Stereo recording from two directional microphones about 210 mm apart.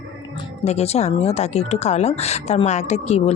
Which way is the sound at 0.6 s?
30° left (ahead or behind).